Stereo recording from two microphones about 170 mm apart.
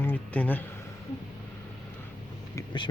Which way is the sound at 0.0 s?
10° left (ahead or behind).